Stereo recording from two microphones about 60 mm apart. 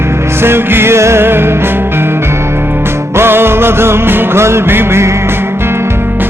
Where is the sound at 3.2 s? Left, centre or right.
Right.